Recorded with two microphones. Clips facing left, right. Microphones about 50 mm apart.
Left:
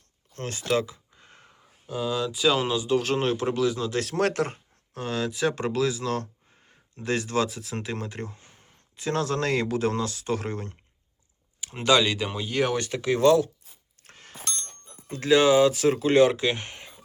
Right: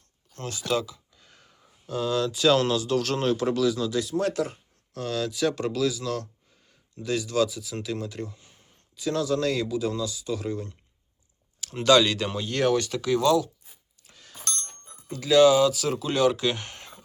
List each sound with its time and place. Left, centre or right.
0.3 s speech: left
4.0 s speech: left
4.9 s speech: left
11.6 s speech: centre
12.7 s speech: left
14.0 s a sound: left
15.0 s speech: left; by 17.0 s centre